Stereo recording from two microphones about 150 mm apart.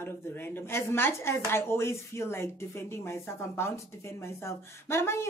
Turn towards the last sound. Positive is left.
turn(degrees=15)  # may be behind; listen again after turning